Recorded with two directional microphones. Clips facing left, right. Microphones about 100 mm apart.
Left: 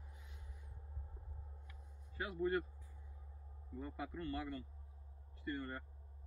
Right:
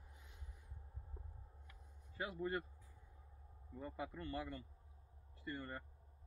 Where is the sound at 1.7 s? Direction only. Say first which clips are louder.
Left 3 dB; 25° right (ahead or behind).